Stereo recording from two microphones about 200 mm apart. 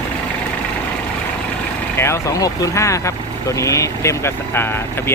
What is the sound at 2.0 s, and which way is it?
Speech, 15° left (ahead or behind).